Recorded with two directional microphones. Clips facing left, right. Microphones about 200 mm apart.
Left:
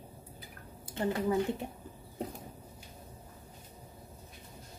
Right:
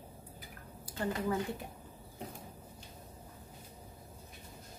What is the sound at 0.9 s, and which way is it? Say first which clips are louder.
Speech: left 4 dB; 20° left (ahead or behind).